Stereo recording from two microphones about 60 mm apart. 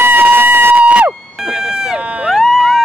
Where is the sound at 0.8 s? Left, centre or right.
Right.